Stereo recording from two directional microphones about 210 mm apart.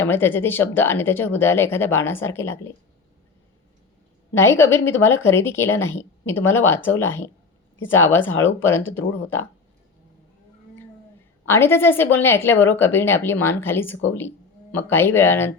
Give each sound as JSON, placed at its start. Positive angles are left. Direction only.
{"t": 0.0, "sound": "speech", "side_deg": 10}
{"t": 4.4, "sound": "speech", "side_deg": 10}
{"t": 9.0, "sound": "speech", "side_deg": 70}
{"t": 11.4, "sound": "speech", "side_deg": 10}